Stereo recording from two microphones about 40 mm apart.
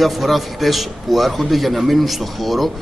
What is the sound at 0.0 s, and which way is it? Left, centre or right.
A man's voice, centre.